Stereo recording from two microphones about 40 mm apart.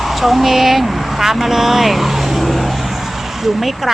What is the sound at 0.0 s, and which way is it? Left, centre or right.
Speech, centre.